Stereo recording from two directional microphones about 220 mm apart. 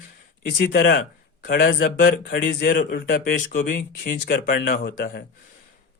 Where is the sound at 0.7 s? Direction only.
50° left (ahead or behind).